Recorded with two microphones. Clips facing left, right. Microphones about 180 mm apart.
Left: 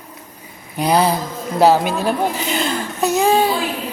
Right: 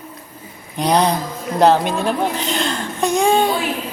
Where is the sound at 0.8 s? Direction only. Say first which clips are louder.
Even; 5° left (ahead or behind).